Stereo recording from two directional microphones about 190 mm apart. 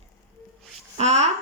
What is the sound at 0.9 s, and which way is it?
Speech, 35° right (ahead or behind).